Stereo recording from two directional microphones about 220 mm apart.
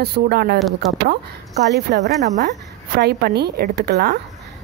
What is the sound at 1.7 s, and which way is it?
A woman's voice, 50° right (ahead or behind).